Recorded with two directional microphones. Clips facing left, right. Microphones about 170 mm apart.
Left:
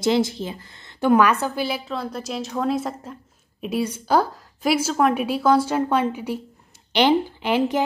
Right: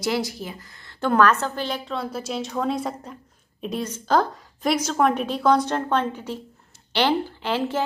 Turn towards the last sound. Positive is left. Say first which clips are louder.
# left 4 dB
turn(degrees=15)  # may be behind; listen again after turning